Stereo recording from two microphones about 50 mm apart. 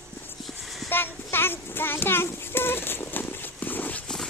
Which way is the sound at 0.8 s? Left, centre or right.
Left.